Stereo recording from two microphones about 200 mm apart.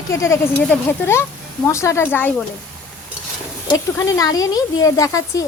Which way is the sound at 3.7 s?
15° left (ahead or behind).